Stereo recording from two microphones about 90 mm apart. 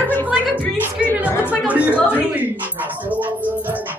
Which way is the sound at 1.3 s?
20° left (ahead or behind).